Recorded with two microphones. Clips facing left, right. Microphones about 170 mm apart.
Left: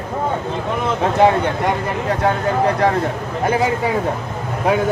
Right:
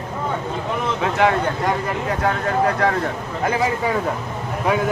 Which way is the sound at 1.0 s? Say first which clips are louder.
Left 4 dB; 35° left (ahead or behind).